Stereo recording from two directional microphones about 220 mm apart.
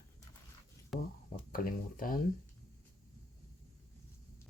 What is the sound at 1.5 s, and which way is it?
Speech, 40° left (ahead or behind).